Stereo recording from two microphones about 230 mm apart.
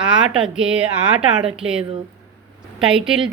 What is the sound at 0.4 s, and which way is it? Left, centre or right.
A woman's voice, centre.